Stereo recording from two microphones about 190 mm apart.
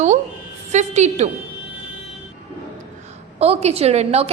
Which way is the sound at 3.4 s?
35° right (ahead or behind).